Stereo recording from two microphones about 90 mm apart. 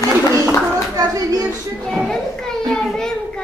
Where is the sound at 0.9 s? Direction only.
40° right (ahead or behind).